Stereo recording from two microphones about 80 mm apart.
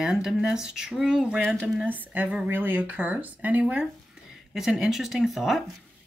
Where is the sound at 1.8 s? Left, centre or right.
Centre.